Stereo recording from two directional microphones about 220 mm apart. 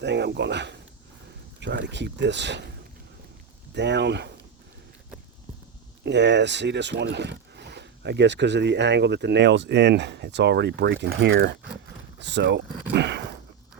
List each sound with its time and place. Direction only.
0.0 s speech: 50° right (ahead or behind)
3.8 s speech: 50° right (ahead or behind)
6.1 s speech: 50° right (ahead or behind)
12.9 s a sound: 50° right (ahead or behind)